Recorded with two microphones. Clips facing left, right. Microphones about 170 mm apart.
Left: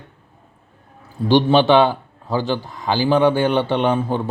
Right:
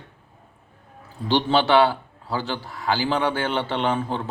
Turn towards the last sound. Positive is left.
turn(degrees=15)  # may be behind; listen again after turning